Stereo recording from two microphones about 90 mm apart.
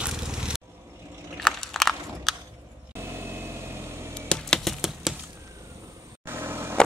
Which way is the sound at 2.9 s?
25° right (ahead or behind).